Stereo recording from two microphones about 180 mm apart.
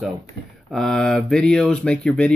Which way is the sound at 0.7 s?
Centre (ahead or behind).